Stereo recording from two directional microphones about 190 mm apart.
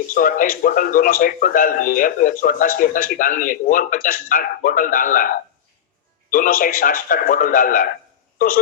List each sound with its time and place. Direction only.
0.1 s a man's voice: 45° left (ahead or behind)